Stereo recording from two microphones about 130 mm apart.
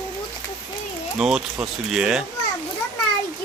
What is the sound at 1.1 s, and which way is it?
Speech, 5° right (ahead or behind).